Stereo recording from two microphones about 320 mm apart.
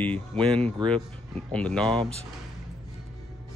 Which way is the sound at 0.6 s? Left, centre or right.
Centre.